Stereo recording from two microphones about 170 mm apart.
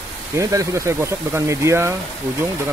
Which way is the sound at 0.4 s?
20° right (ahead or behind).